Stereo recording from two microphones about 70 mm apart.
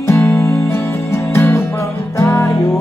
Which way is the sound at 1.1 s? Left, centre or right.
Left.